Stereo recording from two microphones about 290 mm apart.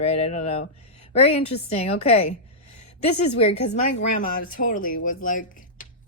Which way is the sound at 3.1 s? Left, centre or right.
Left.